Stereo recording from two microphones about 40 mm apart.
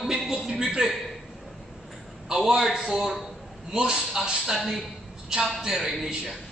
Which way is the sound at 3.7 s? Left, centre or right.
Centre.